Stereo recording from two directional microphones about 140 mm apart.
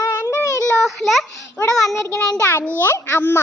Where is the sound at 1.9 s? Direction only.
20° left (ahead or behind).